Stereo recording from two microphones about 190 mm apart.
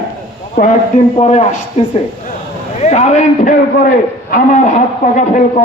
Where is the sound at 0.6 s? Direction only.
50° left (ahead or behind).